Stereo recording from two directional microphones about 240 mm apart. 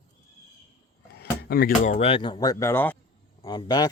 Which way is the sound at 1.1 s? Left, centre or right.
Left.